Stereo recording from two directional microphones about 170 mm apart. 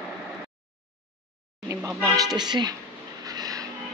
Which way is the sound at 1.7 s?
10° right (ahead or behind).